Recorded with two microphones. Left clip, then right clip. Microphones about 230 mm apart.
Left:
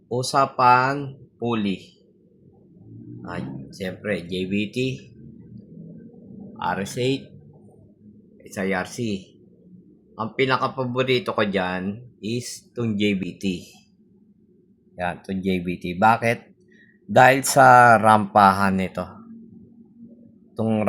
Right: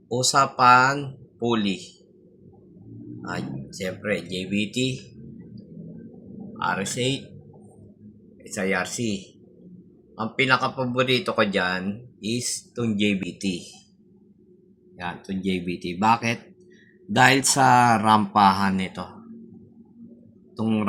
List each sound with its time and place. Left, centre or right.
0.1 s speech: left
3.2 s speech: left
6.6 s speech: left
8.4 s speech: left
14.9 s speech: left
20.6 s speech: left